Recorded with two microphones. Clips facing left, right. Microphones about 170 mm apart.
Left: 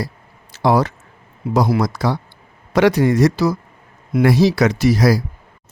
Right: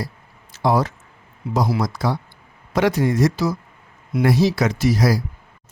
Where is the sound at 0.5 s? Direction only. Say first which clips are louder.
Left 3 dB; 70° left (ahead or behind).